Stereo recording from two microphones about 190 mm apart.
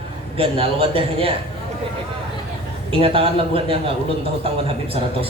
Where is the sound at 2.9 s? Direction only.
30° right (ahead or behind).